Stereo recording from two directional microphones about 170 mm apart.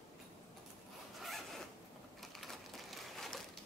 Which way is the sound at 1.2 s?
Centre (ahead or behind).